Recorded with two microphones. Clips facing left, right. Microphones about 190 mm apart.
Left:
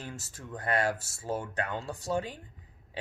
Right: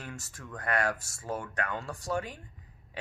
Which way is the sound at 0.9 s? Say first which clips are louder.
Left 1 dB; 5° left (ahead or behind).